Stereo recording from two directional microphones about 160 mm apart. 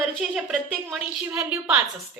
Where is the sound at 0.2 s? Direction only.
5° right (ahead or behind).